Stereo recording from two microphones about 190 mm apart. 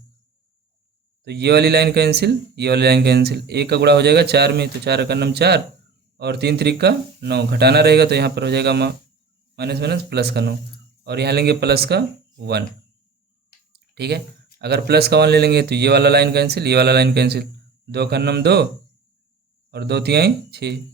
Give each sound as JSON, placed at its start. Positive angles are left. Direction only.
{"t": 1.2, "sound": "speech", "side_deg": -60}
{"t": 13.7, "sound": "a sound", "side_deg": -60}
{"t": 14.6, "sound": "speech", "side_deg": -60}
{"t": 19.7, "sound": "speech", "side_deg": -60}